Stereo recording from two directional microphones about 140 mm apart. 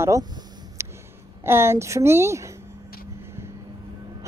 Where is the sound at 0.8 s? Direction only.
20° right (ahead or behind).